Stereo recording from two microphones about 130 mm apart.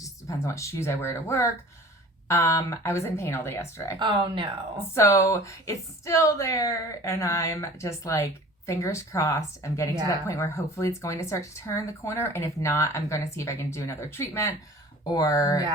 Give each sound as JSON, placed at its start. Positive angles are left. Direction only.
{"t": 0.0, "sound": "a woman's voice", "side_deg": 25}
{"t": 3.9, "sound": "speech", "side_deg": -40}
{"t": 4.9, "sound": "a woman's voice", "side_deg": 20}